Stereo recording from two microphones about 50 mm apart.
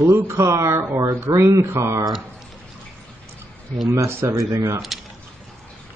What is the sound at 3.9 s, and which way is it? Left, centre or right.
Speech, right.